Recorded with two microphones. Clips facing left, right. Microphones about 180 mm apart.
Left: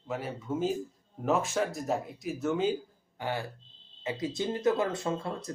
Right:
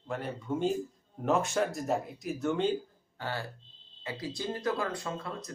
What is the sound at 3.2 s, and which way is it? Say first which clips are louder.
Speech: left 3 dB; 15° left (ahead or behind).